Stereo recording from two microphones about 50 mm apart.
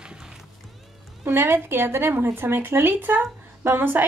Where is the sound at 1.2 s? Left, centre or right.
Right.